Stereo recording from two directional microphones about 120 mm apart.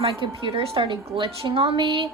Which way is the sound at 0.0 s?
50° right (ahead or behind).